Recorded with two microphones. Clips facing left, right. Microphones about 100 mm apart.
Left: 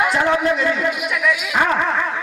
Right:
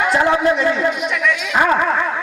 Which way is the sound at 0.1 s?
35° right (ahead or behind).